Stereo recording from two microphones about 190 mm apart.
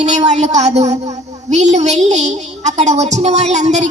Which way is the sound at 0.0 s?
35° right (ahead or behind).